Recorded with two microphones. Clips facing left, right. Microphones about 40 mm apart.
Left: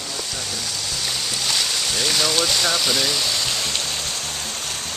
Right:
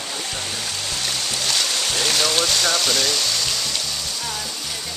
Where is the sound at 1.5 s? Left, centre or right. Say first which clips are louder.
Right 1 dB; centre.